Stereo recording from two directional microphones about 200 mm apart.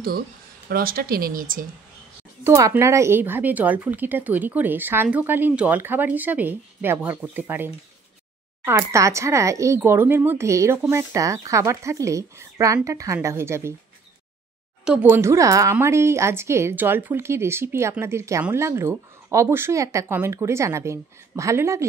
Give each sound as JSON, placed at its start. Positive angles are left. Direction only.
{"t": 0.7, "sound": "speech", "side_deg": -45}
{"t": 2.4, "sound": "a woman's voice", "side_deg": -15}
{"t": 14.9, "sound": "a woman's voice", "side_deg": -10}